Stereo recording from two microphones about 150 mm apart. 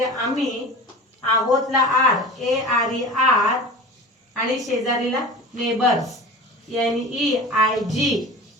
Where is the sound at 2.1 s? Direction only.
Centre (ahead or behind).